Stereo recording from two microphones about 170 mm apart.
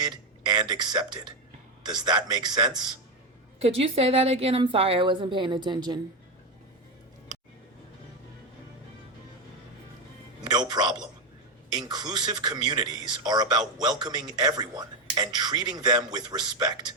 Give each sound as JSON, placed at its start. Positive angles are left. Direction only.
{"t": 0.0, "sound": "a man's voice", "side_deg": -25}
{"t": 3.6, "sound": "a woman's voice", "side_deg": -35}
{"t": 10.4, "sound": "a man's voice", "side_deg": -25}